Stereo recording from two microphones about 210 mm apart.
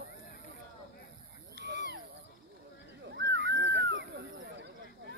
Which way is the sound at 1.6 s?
55° right (ahead or behind).